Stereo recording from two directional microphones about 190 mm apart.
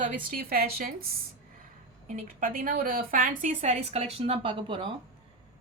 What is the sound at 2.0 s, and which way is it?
A woman's voice, 45° right (ahead or behind).